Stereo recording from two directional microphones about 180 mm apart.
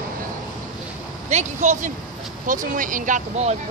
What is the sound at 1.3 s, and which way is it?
Speech, 40° right (ahead or behind).